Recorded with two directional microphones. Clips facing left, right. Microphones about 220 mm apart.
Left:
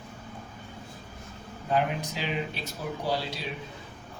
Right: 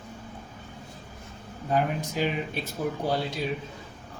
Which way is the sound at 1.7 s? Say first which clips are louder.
Right 2 dB; 50° right (ahead or behind).